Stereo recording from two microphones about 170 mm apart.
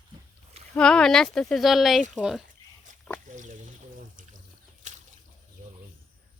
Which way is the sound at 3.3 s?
45° right (ahead or behind).